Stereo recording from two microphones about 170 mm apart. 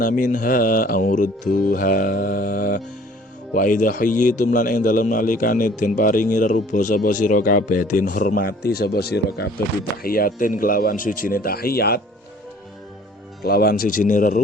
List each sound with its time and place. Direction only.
0.0 s a man's voice: 50° left (ahead or behind); by 9.5 s 70° left (ahead or behind)
10.0 s speech: 60° left (ahead or behind)
13.4 s speech: 65° left (ahead or behind)